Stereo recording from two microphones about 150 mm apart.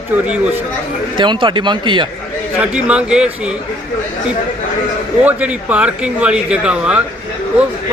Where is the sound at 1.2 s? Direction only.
30° right (ahead or behind).